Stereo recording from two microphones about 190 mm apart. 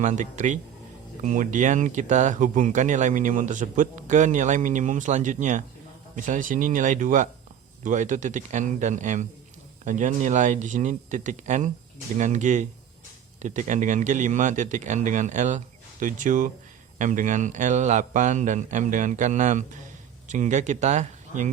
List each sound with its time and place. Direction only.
0.0 s speech: 40° right (ahead or behind)